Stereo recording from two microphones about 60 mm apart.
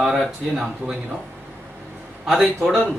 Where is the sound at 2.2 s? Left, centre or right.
Centre.